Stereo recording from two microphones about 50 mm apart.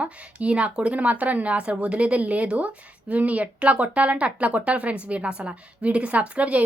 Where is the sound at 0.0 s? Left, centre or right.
Right.